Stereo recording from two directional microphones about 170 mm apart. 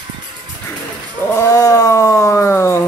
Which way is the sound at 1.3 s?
20° left (ahead or behind).